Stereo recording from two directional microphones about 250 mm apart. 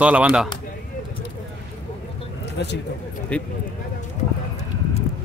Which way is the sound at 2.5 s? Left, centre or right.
Left.